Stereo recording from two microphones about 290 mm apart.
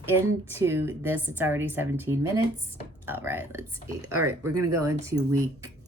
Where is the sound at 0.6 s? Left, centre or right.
Centre.